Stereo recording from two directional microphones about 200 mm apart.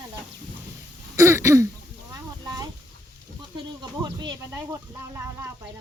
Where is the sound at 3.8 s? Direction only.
20° right (ahead or behind).